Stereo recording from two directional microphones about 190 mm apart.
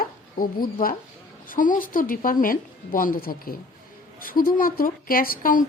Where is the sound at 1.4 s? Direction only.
45° left (ahead or behind).